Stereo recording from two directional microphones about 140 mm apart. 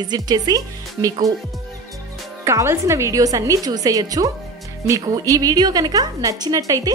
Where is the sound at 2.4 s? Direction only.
20° right (ahead or behind).